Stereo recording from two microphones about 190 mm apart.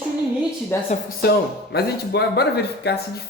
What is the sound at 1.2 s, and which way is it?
Speech, 60° left (ahead or behind).